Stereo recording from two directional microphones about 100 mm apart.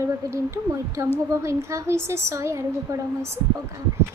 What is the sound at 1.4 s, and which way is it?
Speech, 30° right (ahead or behind).